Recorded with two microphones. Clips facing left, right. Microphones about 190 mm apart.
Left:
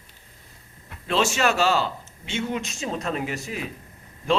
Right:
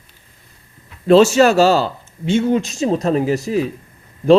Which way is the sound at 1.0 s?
40° right (ahead or behind).